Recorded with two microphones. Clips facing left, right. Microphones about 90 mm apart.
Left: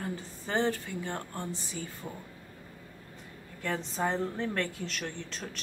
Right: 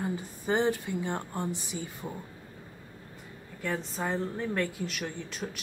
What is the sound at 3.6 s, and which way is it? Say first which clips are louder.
Speech: left 1 dB; centre (ahead or behind).